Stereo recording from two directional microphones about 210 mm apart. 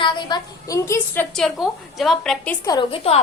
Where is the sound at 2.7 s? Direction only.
25° left (ahead or behind).